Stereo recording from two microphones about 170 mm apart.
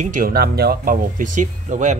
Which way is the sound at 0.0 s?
55° right (ahead or behind).